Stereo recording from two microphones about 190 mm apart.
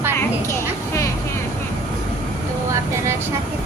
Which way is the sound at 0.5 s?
15° left (ahead or behind).